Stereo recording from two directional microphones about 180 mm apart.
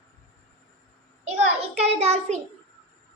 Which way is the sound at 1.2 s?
35° right (ahead or behind).